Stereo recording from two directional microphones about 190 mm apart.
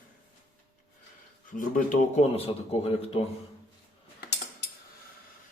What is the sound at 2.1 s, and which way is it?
A man's voice, 35° left (ahead or behind).